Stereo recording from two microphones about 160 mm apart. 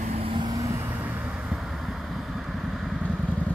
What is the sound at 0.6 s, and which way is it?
Vehicle, 15° right (ahead or behind).